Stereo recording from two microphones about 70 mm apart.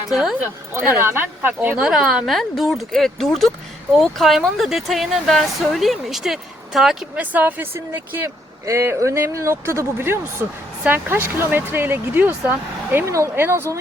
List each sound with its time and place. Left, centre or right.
0.1 s speech: centre
0.7 s speech: right
1.8 s speech: centre
7.2 s speech: right
13.1 s speech: right
13.3 s speech: right